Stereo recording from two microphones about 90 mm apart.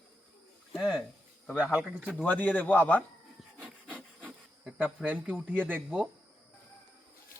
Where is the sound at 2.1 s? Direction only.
15° left (ahead or behind).